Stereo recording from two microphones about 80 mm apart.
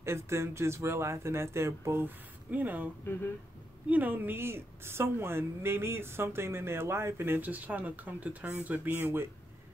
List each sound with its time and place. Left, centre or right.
0.0 s speech: right
2.5 s a woman's voice: right
3.9 s a woman's voice: right